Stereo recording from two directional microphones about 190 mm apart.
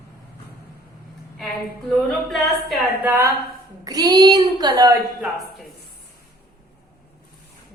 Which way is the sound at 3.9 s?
20° right (ahead or behind).